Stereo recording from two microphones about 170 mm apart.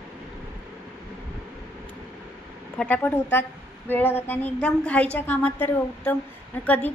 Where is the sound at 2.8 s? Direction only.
10° left (ahead or behind).